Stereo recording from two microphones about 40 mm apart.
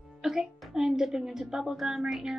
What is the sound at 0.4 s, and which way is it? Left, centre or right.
Speech, centre.